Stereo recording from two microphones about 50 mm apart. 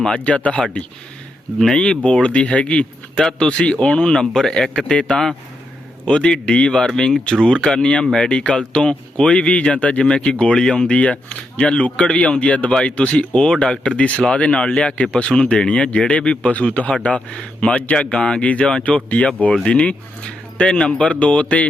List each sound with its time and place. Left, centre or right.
0.0 s speech: left
1.7 s speech: centre